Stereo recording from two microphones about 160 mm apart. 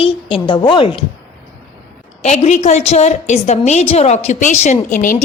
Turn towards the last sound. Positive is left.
turn(degrees=55)  # may be behind; listen again after turning